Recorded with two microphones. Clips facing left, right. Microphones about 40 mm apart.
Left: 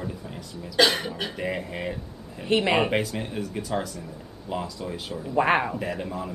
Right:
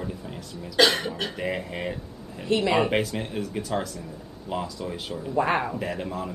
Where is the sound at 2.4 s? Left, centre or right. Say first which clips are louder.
Even; left.